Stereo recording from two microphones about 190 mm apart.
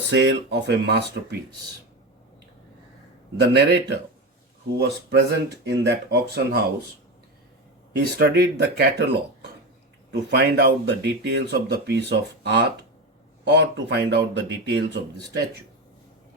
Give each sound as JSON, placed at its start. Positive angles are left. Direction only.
{"t": 0.1, "sound": "speech", "side_deg": -65}
{"t": 3.3, "sound": "speech", "side_deg": -60}
{"t": 8.2, "sound": "speech", "side_deg": -60}
{"t": 10.1, "sound": "speech", "side_deg": -65}